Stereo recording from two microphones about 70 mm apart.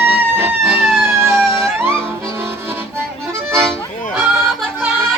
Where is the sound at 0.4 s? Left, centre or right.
Right.